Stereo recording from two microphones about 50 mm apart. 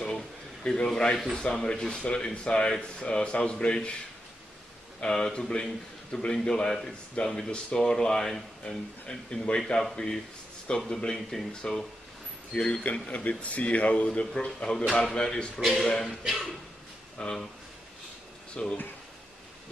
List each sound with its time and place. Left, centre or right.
0.7 s speech: centre
5.1 s speech: centre
11.1 s speech: centre
13.1 s speech: left
15.6 s speech: centre
17.2 s speech: centre
18.5 s speech: centre